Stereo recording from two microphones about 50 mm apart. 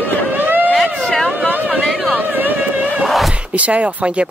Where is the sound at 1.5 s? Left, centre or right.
Right.